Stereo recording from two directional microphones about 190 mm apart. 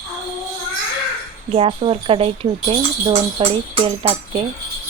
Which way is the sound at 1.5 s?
30° right (ahead or behind).